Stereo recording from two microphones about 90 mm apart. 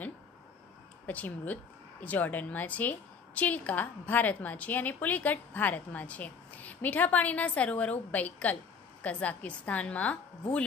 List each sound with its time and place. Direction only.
1.0 s speech: 20° left (ahead or behind)